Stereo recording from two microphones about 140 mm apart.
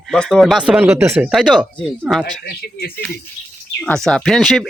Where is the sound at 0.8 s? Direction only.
20° right (ahead or behind).